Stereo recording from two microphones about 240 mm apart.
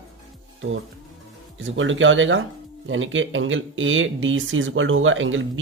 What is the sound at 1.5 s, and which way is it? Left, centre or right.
Speech, right.